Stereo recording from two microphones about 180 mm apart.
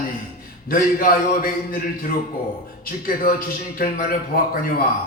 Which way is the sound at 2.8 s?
55° left (ahead or behind).